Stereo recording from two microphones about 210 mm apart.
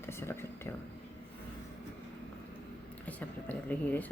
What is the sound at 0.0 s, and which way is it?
Whispering, 10° left (ahead or behind).